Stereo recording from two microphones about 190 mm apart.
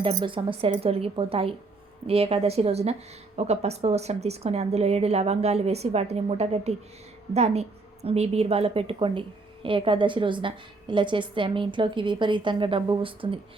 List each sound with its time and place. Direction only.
0.0 s a woman's voice: 25° right (ahead or behind)